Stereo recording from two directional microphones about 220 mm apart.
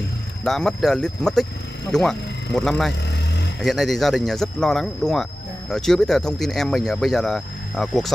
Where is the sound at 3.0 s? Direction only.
50° left (ahead or behind).